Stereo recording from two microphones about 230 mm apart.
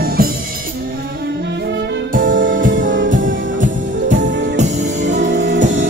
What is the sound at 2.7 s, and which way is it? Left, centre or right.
Music, right.